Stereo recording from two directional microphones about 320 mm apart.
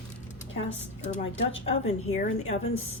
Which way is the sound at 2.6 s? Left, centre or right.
Left.